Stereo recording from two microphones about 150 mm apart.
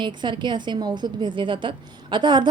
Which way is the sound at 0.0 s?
30° right (ahead or behind).